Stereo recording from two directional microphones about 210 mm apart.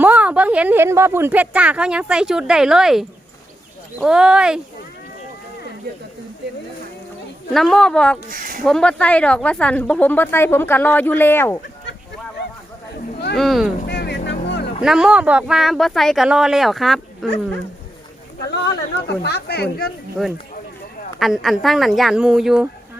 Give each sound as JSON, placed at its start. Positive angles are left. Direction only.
{"t": 0.0, "sound": "speech", "side_deg": -5}
{"t": 7.5, "sound": "speech", "side_deg": 0}
{"t": 8.3, "sound": "speech", "side_deg": -40}
{"t": 8.6, "sound": "a woman's voice", "side_deg": 5}
{"t": 13.3, "sound": "speech", "side_deg": 0}
{"t": 13.7, "sound": "vehicle", "side_deg": 50}
{"t": 14.4, "sound": "music", "side_deg": 55}
{"t": 14.8, "sound": "speech", "side_deg": -5}
{"t": 18.5, "sound": "speech", "side_deg": 55}
{"t": 20.2, "sound": "speech", "side_deg": 0}